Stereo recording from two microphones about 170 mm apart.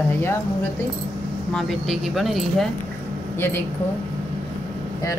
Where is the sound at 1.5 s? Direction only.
Centre (ahead or behind).